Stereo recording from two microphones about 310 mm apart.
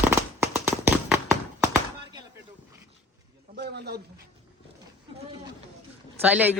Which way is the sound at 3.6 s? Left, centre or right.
Right.